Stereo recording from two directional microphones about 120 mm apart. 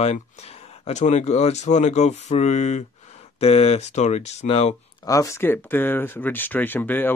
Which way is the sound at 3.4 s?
55° left (ahead or behind).